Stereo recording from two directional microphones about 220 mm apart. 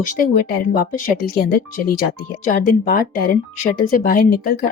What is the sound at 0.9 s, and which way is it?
Speech, 40° left (ahead or behind).